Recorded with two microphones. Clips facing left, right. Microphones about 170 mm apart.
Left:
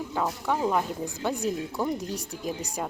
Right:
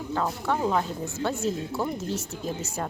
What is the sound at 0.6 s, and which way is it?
A woman's voice, 10° left (ahead or behind).